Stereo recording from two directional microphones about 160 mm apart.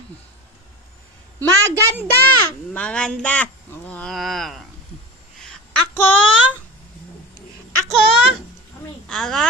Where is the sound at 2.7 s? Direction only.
5° left (ahead or behind).